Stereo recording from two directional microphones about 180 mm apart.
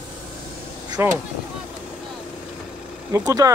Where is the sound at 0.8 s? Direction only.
20° right (ahead or behind).